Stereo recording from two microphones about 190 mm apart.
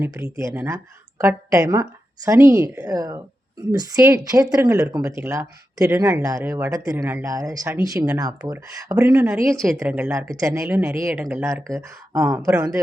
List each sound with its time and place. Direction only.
0.0 s speech: 15° right (ahead or behind)
9.0 s speech: 5° right (ahead or behind)